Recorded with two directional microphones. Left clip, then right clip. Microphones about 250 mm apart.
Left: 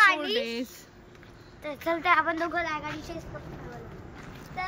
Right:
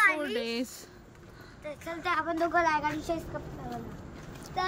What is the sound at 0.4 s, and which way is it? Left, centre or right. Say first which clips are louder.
Speech: left 2 dB; centre.